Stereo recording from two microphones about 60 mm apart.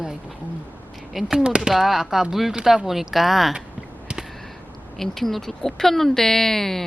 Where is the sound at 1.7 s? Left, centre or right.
Centre.